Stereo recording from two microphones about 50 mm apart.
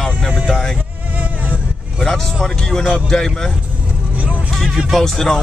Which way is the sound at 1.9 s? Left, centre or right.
Centre.